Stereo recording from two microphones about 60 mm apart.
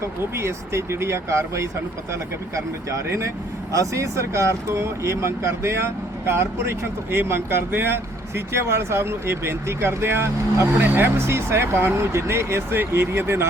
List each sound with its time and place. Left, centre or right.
0.0 s speech: right
3.1 s speech: right
10.8 s speech: right
11.3 s speech: right